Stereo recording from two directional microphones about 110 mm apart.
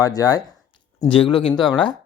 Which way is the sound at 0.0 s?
35° left (ahead or behind).